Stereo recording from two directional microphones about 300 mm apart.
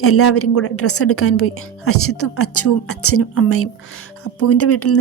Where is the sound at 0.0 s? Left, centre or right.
Left.